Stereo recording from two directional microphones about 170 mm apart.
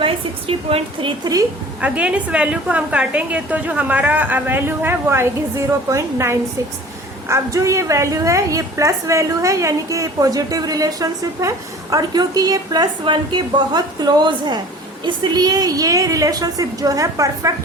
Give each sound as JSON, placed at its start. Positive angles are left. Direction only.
{"t": 0.0, "sound": "a woman's voice", "side_deg": -30}
{"t": 1.8, "sound": "a woman's voice", "side_deg": -10}